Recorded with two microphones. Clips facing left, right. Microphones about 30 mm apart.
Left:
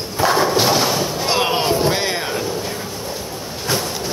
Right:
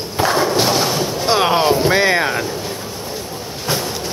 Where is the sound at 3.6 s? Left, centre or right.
Centre.